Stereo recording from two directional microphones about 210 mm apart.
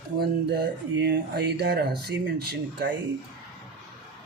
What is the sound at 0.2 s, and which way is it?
Speech, 50° right (ahead or behind).